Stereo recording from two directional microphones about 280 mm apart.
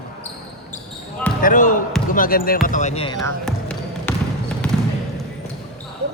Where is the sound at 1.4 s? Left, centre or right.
Left.